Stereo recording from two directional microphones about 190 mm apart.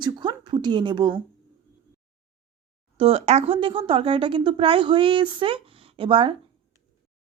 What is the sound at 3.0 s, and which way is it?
Speech, 35° right (ahead or behind).